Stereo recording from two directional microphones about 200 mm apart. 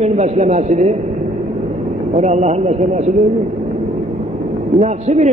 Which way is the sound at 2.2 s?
35° right (ahead or behind).